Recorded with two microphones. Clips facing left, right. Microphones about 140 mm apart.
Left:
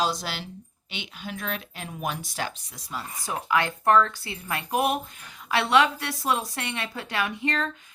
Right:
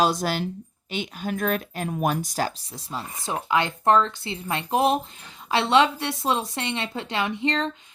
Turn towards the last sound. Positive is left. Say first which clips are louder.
# right 3 dB
turn(degrees=-20)  # may be behind; listen again after turning